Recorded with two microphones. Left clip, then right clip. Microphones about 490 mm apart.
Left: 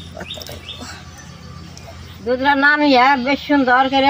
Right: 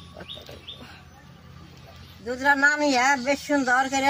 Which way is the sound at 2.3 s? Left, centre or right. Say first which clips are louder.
Left 6 dB; right.